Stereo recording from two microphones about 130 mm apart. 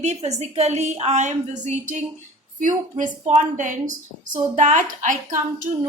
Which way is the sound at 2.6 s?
75° right (ahead or behind).